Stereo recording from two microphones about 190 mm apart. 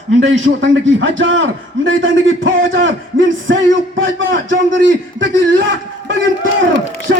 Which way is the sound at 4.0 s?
85° right.